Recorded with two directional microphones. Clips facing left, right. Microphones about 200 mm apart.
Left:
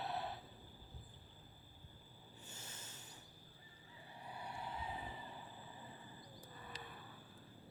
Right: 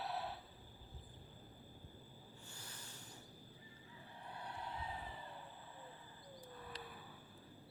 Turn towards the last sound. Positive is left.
turn(degrees=0)  # may be behind; listen again after turning